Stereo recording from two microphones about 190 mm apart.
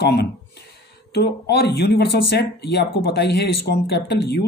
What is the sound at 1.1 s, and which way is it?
Speech, 60° left (ahead or behind).